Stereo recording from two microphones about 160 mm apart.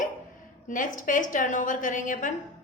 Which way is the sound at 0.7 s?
55° left (ahead or behind).